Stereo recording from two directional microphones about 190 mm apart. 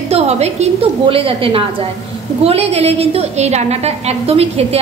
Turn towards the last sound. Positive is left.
turn(degrees=-30)  # may be behind; listen again after turning